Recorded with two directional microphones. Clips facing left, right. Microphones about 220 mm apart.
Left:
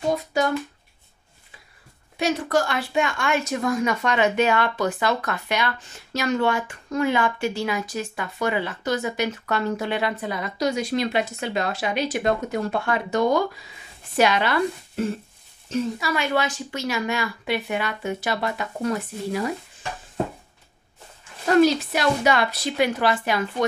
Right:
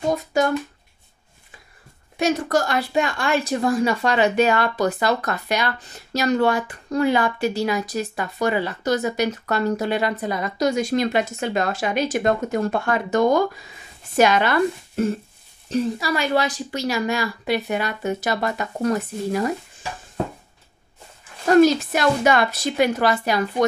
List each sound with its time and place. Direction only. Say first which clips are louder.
0.1 s a woman's voice: right 3 dB; 45° right (ahead or behind)
2.1 s a woman's voice: right 2 dB; 45° right (ahead or behind)
15.7 s a woman's voice: right 3 dB; 35° right (ahead or behind)
21.5 s a woman's voice: right 3 dB; 45° right (ahead or behind)